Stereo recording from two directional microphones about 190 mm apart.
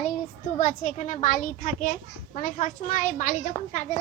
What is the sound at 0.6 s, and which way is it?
A child's voice, 40° left (ahead or behind).